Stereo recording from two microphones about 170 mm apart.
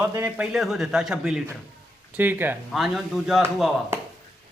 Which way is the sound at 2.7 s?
Centre (ahead or behind).